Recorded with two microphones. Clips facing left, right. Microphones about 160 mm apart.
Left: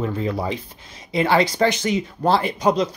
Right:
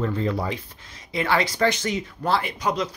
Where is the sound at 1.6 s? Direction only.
10° left (ahead or behind).